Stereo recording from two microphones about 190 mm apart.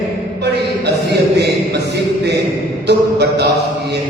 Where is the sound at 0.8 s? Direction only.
60° right (ahead or behind).